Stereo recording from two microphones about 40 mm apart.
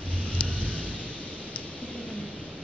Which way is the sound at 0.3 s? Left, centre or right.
Left.